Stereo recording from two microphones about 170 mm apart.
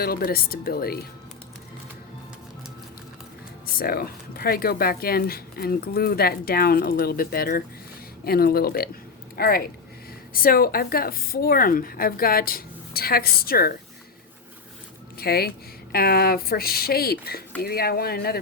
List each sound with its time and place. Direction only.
0.0 s speech: 60° left (ahead or behind)
3.8 s speech: 60° left (ahead or behind)
15.2 s speech: 65° left (ahead or behind)